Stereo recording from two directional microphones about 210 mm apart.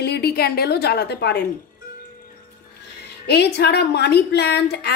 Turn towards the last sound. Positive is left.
turn(degrees=55)  # may be behind; listen again after turning